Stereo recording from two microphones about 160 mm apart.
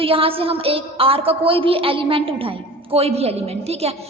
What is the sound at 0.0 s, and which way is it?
A woman's voice, 35° right (ahead or behind).